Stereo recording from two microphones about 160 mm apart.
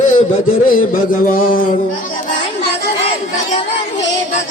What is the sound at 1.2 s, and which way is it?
Music, 60° left (ahead or behind).